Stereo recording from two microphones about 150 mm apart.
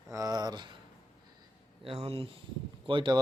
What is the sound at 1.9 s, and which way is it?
Speech, 40° right (ahead or behind).